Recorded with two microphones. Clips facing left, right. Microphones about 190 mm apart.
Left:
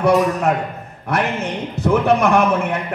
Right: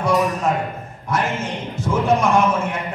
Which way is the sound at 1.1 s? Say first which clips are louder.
Left 2 dB; 65° left (ahead or behind).